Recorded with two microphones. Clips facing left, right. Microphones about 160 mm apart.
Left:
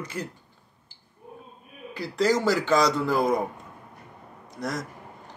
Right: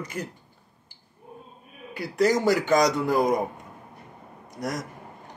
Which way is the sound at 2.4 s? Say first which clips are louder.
Right 1 dB; 15° right (ahead or behind).